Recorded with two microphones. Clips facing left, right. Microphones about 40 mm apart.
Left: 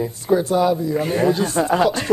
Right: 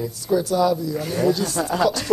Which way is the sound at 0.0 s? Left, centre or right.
Left.